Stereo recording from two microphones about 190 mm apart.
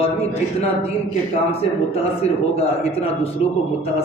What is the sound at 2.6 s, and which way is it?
Speech, 30° left (ahead or behind).